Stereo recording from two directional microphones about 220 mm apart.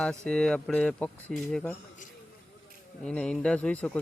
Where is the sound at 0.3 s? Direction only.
5° left (ahead or behind).